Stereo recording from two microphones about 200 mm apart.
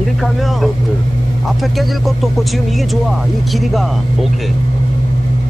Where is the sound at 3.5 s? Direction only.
Centre (ahead or behind).